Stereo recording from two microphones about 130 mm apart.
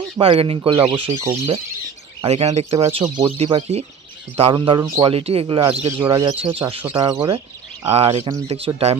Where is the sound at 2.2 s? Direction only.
55° right (ahead or behind).